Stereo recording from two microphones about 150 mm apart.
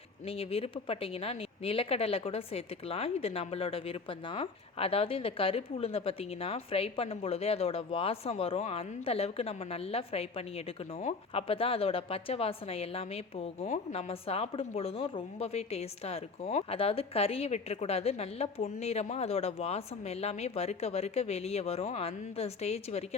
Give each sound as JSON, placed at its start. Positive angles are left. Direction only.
{"t": 0.3, "sound": "speech", "side_deg": 40}